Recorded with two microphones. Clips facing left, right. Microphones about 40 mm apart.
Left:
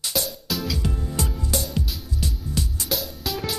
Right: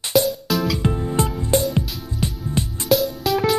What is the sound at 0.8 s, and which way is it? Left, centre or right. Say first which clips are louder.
Music: right 7 dB; right.